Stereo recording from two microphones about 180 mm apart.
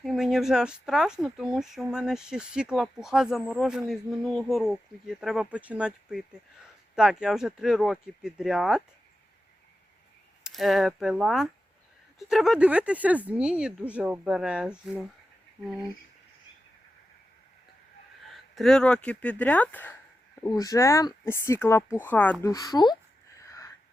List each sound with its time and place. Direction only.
0.0 s speech: centre (ahead or behind)
10.4 s speech: centre (ahead or behind)
18.3 s speech: centre (ahead or behind); by 23.0 s 20° left (ahead or behind)
23.4 s a sound: 20° left (ahead or behind)